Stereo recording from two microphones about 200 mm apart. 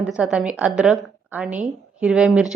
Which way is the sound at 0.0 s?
5° right (ahead or behind).